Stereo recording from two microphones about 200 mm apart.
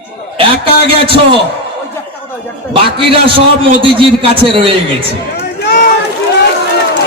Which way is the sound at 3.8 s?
25° right (ahead or behind).